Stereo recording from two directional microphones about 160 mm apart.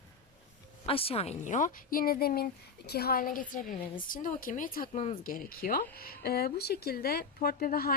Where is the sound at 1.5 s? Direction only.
55° left (ahead or behind).